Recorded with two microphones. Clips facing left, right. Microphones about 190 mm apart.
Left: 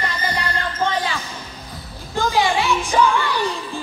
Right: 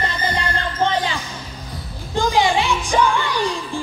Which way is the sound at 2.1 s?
15° right (ahead or behind).